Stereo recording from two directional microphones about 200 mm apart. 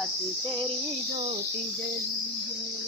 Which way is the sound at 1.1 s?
30° right (ahead or behind).